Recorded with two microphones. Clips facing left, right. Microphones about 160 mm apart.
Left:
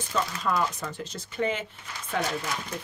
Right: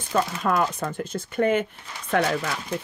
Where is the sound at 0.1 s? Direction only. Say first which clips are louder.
Right 5 dB; 55° right (ahead or behind).